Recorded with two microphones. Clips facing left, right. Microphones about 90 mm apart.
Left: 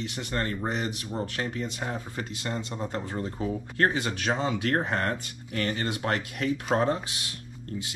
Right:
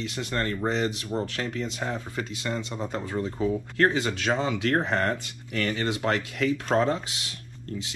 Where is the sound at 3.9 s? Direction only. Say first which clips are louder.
Right 2 dB; 20° left (ahead or behind).